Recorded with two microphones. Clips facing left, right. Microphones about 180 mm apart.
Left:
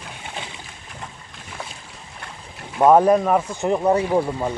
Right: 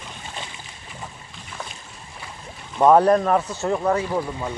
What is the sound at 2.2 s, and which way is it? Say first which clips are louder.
Speech: left 1 dB; 5° left (ahead or behind).